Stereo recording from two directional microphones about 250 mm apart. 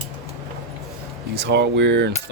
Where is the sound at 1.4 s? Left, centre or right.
Right.